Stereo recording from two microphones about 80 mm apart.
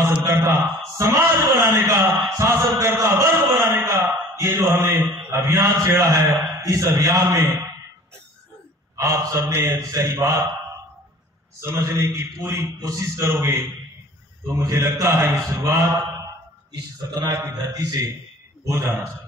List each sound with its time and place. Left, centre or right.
0.0 s a sound: right
5.3 s a man's voice: right
8.9 s a man's voice: right
11.6 s a man's voice: right
17.1 s a man's voice: right
18.7 s a man's voice: right